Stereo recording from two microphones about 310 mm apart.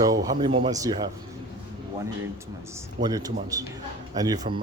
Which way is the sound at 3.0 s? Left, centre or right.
Centre.